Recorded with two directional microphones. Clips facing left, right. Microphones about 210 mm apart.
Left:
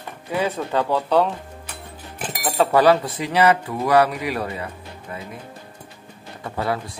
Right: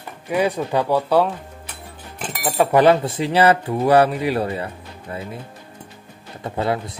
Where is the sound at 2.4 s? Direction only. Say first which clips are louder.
Right 2 dB; 15° right (ahead or behind).